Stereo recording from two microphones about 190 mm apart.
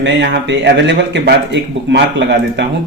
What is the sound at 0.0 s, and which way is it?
A man's voice, 70° right (ahead or behind).